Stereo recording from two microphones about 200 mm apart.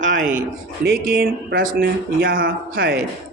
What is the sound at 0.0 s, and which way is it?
A man's voice, 40° right (ahead or behind).